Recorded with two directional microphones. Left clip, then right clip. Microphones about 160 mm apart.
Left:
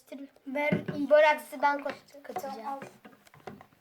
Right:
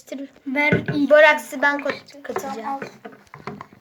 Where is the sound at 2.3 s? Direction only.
20° left (ahead or behind).